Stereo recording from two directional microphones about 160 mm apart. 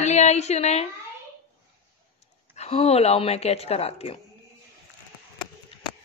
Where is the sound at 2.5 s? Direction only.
40° left (ahead or behind).